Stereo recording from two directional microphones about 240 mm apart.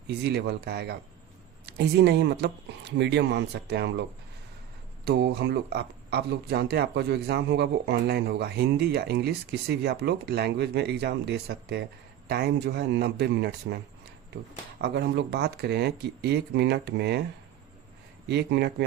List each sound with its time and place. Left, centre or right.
0.1 s speech: right
5.0 s speech: right
14.8 s speech: right
18.3 s speech: right